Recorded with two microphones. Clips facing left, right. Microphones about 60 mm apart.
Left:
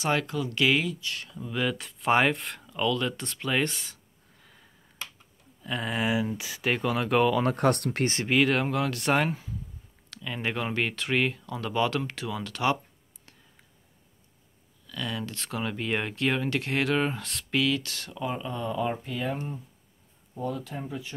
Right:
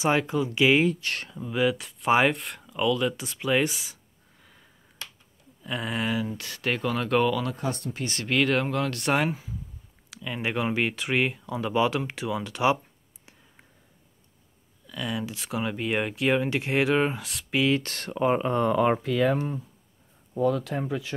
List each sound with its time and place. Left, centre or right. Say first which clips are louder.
0.0 s speech: right 3 dB; centre
1.0 s speech: right 4 dB; right
1.3 s speech: right 4 dB; centre
6.1 s speech: left 1 dB; centre
7.4 s speech: left 6 dB; left
8.3 s speech: right 1 dB; centre
14.9 s speech: right 2 dB; centre
17.6 s speech: right 3 dB; right
17.8 s speech: right 8 dB; right